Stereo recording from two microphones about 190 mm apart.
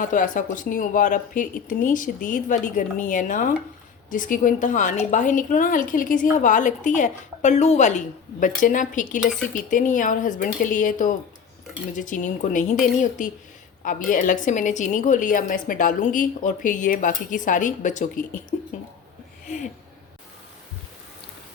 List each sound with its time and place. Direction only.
0.0 s a woman's voice: 45° left (ahead or behind)